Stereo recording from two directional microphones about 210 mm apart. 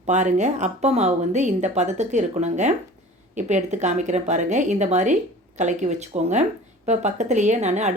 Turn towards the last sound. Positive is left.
turn(degrees=-35)  # may be behind; listen again after turning